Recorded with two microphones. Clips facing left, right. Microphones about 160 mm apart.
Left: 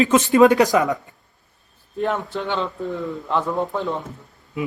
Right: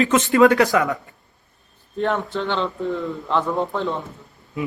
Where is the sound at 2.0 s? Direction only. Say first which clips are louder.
Right 1 dB; 10° left (ahead or behind).